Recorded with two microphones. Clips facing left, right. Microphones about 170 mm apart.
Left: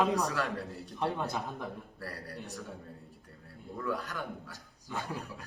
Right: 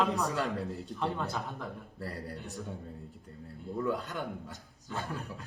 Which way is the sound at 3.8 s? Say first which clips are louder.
Right 3 dB; 20° right (ahead or behind).